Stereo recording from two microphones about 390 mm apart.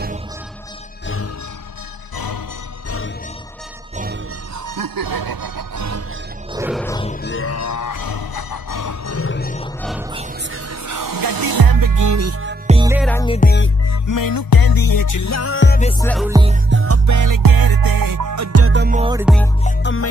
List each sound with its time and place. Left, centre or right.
1.0 s music: left
2.1 s music: left
4.6 s music: right
6.5 s music: centre
6.8 s music: centre
7.2 s grunt: left
9.8 s music: centre
10.5 s music: right
12.6 s music: centre
13.1 s music: centre
14.0 s music: left; by 16.3 s centre
16.3 s music: centre
16.7 s music: right; by 19.5 s centre
19.6 s music: left